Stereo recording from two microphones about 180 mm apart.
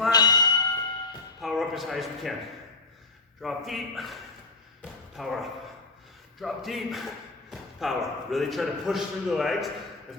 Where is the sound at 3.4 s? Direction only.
Centre (ahead or behind).